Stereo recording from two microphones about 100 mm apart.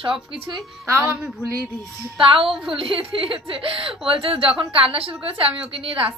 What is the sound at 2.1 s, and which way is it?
Speech, 60° right (ahead or behind).